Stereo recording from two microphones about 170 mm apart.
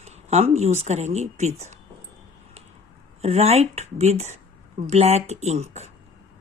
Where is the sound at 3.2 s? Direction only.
40° right (ahead or behind).